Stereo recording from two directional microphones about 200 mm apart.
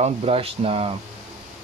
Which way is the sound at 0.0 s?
30° right (ahead or behind).